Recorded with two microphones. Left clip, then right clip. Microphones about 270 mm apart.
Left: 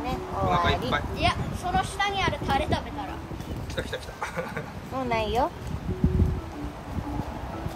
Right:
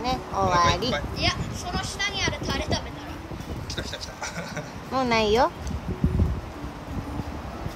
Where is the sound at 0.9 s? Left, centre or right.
Centre.